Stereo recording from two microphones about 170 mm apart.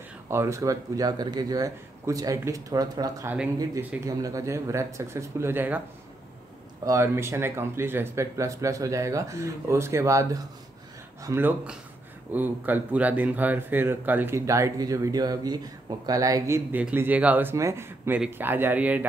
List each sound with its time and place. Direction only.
0.3 s a man's voice: 15° right (ahead or behind)
6.9 s speech: 15° right (ahead or behind)